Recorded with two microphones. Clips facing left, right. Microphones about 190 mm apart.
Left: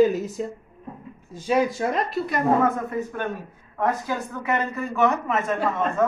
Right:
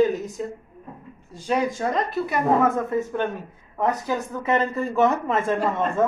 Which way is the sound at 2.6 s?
25° right (ahead or behind).